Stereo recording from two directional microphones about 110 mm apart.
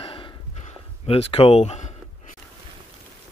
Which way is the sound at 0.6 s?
70° left (ahead or behind).